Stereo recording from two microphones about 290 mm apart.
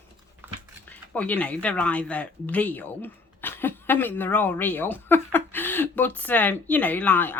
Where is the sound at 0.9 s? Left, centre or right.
Centre.